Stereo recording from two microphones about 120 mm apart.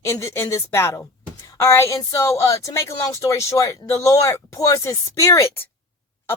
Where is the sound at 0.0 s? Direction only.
25° left (ahead or behind).